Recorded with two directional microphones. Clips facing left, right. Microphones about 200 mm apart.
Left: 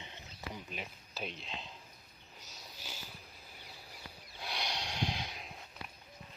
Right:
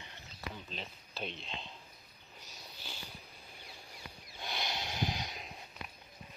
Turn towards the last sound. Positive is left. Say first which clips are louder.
# right 1 dB
turn(degrees=0)  # may be behind; listen again after turning